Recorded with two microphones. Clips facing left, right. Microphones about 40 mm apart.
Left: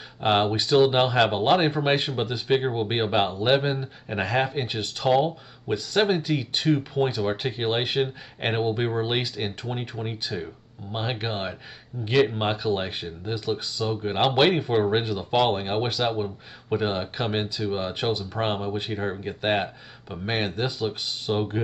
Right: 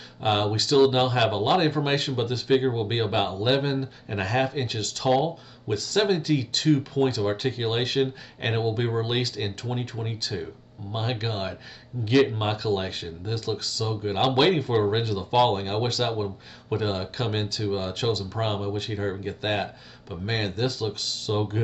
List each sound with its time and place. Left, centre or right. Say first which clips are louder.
0.2 s speech: left 2 dB; centre